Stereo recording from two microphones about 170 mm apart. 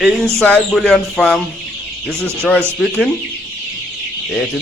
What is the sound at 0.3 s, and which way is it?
Speech, 5° left (ahead or behind).